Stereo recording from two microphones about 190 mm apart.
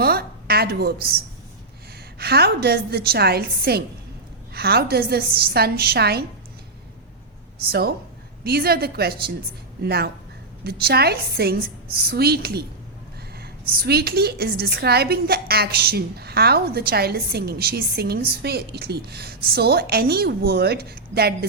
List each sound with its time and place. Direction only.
0.0 s a sound: 55° right (ahead or behind)
2.1 s a woman's voice: 60° right (ahead or behind)
7.7 s a woman's voice: 55° right (ahead or behind)